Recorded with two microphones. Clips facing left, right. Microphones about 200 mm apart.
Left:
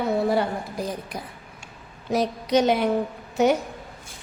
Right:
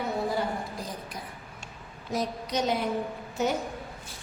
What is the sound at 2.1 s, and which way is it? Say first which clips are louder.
A woman's voice: left 8 dB; 75° left (ahead or behind).